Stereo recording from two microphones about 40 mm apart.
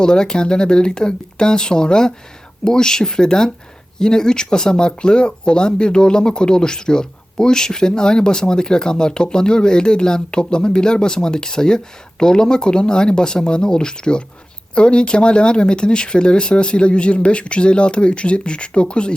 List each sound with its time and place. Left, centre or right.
0.0 s speech: centre